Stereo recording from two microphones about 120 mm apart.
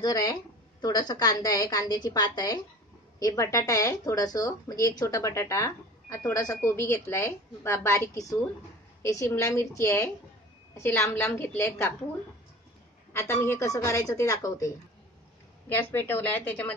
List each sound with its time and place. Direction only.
0.0 s a woman's voice: 30° left (ahead or behind)
13.1 s speech: 20° left (ahead or behind)
15.7 s speech: 15° left (ahead or behind)